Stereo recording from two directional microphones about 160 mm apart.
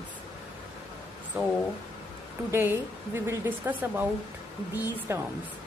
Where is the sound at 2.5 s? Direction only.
15° right (ahead or behind).